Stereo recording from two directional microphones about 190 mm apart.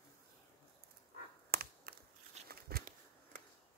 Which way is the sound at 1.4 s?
55° right (ahead or behind).